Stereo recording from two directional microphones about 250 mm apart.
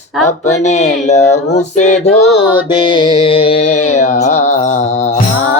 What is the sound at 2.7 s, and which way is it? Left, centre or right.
Music, centre.